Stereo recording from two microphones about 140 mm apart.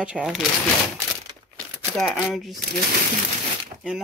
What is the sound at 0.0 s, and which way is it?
Speech, 5° right (ahead or behind).